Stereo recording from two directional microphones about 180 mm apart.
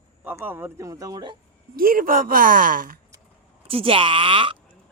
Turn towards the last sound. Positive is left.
turn(degrees=-30)  # may be behind; listen again after turning